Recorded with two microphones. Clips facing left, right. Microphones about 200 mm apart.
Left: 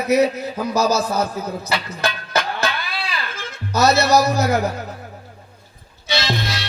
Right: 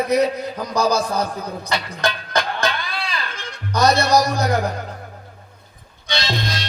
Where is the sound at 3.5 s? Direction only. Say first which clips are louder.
Even; 5° left (ahead or behind).